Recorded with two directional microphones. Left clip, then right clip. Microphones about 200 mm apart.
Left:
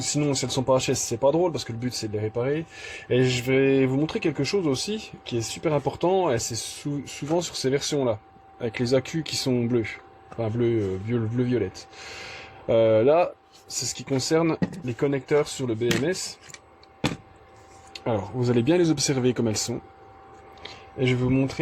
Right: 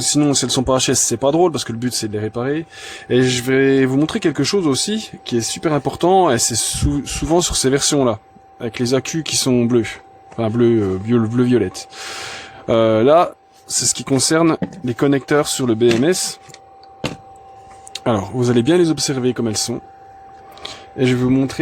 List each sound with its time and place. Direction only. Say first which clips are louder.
0.0 s speech: right 9 dB; 55° right (ahead or behind)
8.6 s speech: right 5 dB; 30° right (ahead or behind); by 16.1 s 60° right (ahead or behind)
17.9 s speech: right 8 dB; 40° right (ahead or behind); by 19.8 s 20° right (ahead or behind)
20.6 s speech: right 8 dB; 50° right (ahead or behind)